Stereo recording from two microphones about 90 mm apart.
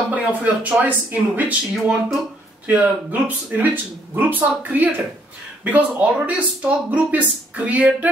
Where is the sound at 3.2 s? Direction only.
20° right (ahead or behind).